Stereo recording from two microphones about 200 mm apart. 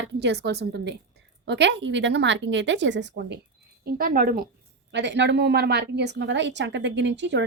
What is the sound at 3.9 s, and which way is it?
Speech, 45° right (ahead or behind).